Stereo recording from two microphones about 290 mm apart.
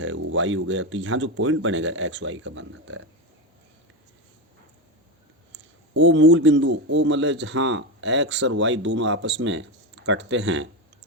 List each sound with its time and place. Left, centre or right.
0.0 s a man's voice: right
5.9 s a man's voice: right